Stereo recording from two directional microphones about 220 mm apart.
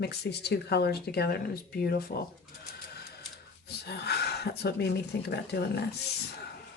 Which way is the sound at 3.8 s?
50° left (ahead or behind).